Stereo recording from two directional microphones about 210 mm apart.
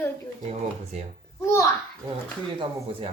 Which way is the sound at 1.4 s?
15° left (ahead or behind).